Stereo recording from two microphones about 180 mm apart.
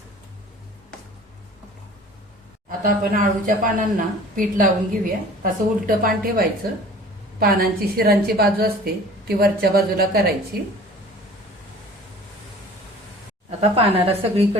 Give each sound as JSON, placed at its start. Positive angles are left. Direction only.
{"t": 2.6, "sound": "a woman's voice", "side_deg": -50}
{"t": 13.6, "sound": "a woman's voice", "side_deg": -35}